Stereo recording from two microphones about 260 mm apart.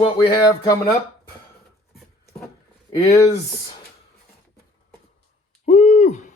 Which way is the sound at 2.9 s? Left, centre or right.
Centre.